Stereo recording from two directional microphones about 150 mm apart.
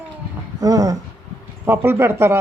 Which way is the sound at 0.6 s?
25° right (ahead or behind).